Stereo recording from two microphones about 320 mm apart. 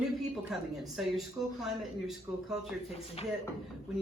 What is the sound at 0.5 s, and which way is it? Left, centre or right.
Speech, centre.